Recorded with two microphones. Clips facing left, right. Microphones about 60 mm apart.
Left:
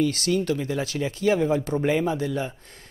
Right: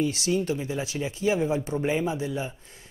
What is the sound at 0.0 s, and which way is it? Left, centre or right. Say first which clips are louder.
Speech: left 2 dB; left.